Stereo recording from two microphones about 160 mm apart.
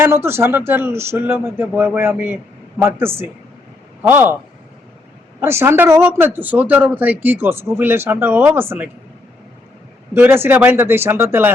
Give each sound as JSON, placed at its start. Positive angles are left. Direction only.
{"t": 0.0, "sound": "speech", "side_deg": -15}
{"t": 5.4, "sound": "speech", "side_deg": -15}
{"t": 10.2, "sound": "speech", "side_deg": -15}